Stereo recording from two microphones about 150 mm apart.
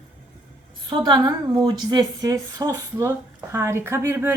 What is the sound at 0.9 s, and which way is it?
A woman's voice, 30° right (ahead or behind).